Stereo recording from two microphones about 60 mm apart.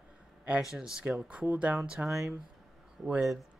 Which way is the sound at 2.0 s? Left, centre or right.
Right.